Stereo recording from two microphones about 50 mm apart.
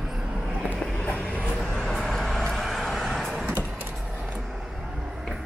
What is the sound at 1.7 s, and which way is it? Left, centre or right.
Vehicle, centre.